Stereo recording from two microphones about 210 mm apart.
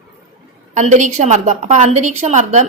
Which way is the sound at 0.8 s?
35° right (ahead or behind).